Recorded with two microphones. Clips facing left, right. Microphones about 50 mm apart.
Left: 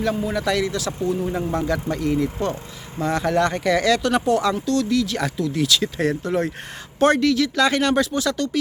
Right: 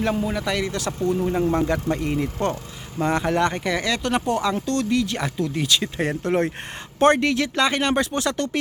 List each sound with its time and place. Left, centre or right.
0.2 s speech: centre
1.5 s speech: right
6.2 s speech: right
8.2 s speech: right